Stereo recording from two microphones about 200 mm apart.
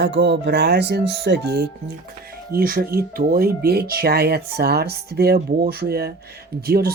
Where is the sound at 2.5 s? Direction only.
45° right (ahead or behind).